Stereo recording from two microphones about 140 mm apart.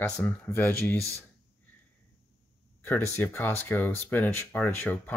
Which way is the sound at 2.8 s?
15° left (ahead or behind).